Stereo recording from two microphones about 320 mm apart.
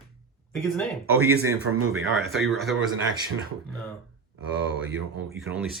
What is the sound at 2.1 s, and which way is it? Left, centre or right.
Speech, centre.